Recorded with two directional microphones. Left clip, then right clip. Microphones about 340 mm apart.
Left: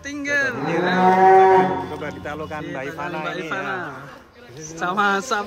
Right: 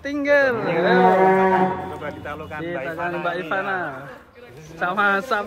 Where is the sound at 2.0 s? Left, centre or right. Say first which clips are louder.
Left 1 dB; left.